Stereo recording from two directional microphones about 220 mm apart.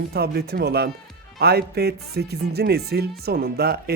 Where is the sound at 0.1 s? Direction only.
45° right (ahead or behind).